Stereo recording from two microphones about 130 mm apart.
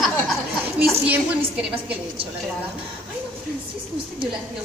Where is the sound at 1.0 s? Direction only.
10° right (ahead or behind).